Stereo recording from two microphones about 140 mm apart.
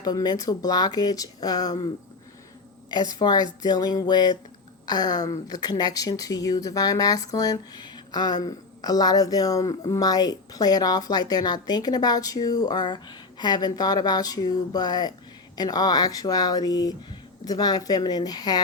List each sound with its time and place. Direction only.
0.0 s a woman's voice: 30° left (ahead or behind)
2.9 s a woman's voice: 30° left (ahead or behind)